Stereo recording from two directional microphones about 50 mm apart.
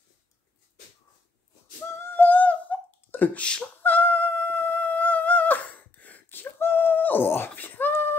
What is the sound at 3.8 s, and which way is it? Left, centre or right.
Dog, left.